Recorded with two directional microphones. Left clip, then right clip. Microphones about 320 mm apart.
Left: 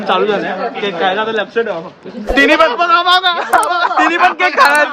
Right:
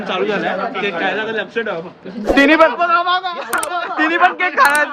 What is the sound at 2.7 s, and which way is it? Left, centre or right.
Speech, left.